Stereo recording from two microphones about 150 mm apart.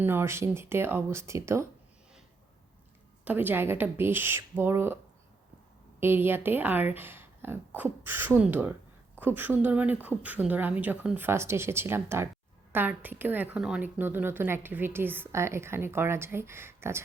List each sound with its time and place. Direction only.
0.0 s speech: 15° right (ahead or behind)
3.2 s speech: 15° right (ahead or behind)
6.0 s speech: 15° right (ahead or behind)